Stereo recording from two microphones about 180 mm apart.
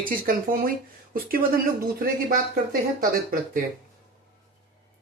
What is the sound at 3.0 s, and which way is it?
Speech, 55° right (ahead or behind).